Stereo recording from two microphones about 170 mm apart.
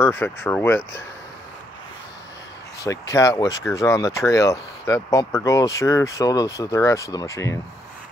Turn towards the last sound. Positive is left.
turn(degrees=20)  # may be behind; listen again after turning